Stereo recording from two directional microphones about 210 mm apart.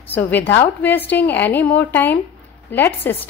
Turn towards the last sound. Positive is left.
turn(degrees=10)  # may be behind; listen again after turning